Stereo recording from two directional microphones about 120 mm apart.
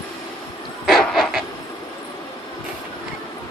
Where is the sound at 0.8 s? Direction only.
Centre (ahead or behind).